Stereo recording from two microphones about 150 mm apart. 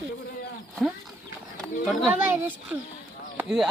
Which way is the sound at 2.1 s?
15° right (ahead or behind).